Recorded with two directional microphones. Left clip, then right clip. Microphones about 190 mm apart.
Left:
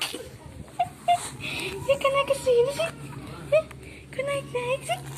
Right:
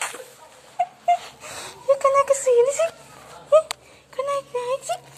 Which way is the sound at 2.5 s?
45° right (ahead or behind).